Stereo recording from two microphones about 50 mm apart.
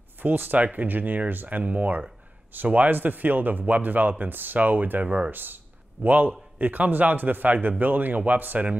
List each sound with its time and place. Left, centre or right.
0.2 s speech: right